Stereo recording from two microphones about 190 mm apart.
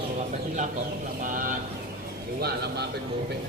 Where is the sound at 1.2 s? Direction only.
45° right (ahead or behind).